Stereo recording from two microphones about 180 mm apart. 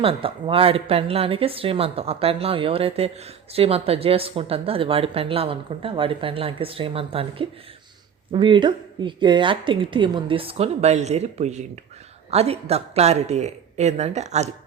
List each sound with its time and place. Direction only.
0.0 s speech: 30° right (ahead or behind)